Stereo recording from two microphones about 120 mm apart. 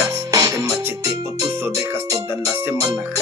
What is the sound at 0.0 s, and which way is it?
Music, 30° right (ahead or behind).